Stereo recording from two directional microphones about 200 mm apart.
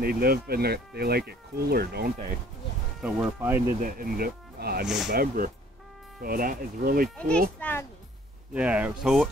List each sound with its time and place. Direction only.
0.0 s speech: 50° right (ahead or behind)
3.0 s speech: 5° right (ahead or behind)
3.8 s speech: 45° right (ahead or behind)
4.8 s speech: centre (ahead or behind)
5.1 s speech: 45° right (ahead or behind)
7.6 s a child's voice: 10° left (ahead or behind)
8.5 s speech: 5° right (ahead or behind)